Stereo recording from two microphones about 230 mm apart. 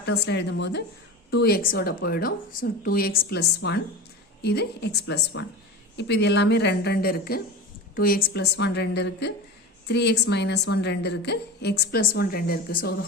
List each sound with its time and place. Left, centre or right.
0.3 s a woman's voice: left